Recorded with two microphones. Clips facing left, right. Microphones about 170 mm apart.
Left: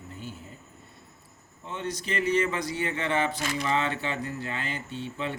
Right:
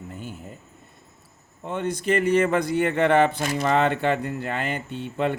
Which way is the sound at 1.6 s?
55° right (ahead or behind).